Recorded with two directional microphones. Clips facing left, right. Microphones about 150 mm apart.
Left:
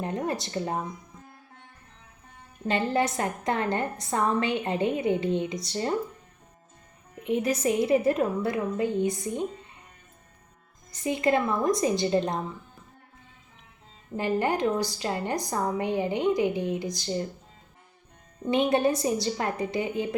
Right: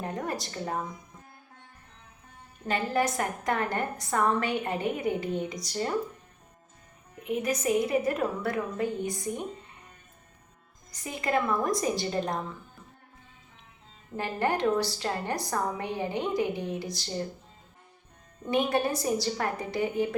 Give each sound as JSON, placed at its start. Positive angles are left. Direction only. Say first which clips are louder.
{"t": 0.0, "sound": "a woman's voice", "louder": "left 3 dB", "side_deg": 25}
{"t": 2.6, "sound": "a woman's voice", "louder": "left 2 dB", "side_deg": 25}
{"t": 7.3, "sound": "a woman's voice", "louder": "left 3 dB", "side_deg": 30}
{"t": 11.0, "sound": "a woman's voice", "louder": "left 4 dB", "side_deg": 25}
{"t": 14.2, "sound": "a woman's voice", "louder": "left 3 dB", "side_deg": 15}
{"t": 18.5, "sound": "a woman's voice", "louder": "left 3 dB", "side_deg": 20}